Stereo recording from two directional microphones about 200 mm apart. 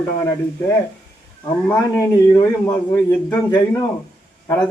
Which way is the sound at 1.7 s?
20° left (ahead or behind).